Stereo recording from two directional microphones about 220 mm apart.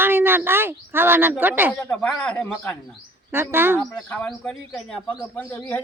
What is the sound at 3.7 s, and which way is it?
A man's voice, 5° left (ahead or behind).